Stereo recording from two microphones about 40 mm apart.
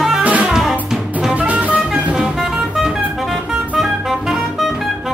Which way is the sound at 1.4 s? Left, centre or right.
Right.